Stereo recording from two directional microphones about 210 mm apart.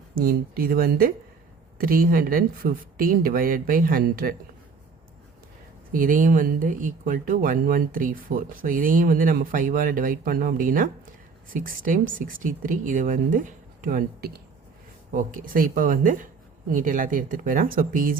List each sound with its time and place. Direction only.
0.2 s speech: 45° right (ahead or behind)
5.9 s speech: 40° right (ahead or behind)